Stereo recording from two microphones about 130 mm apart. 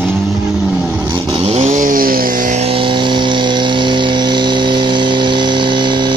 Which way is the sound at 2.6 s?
45° right (ahead or behind).